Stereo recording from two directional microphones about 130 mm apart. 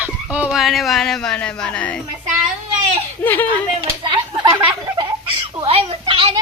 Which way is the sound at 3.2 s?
15° left (ahead or behind).